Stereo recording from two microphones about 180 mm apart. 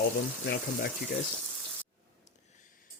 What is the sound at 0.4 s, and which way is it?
Speech, 65° left (ahead or behind).